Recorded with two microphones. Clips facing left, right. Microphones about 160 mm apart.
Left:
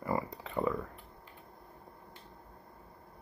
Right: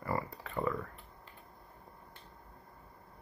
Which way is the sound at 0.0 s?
15° left (ahead or behind).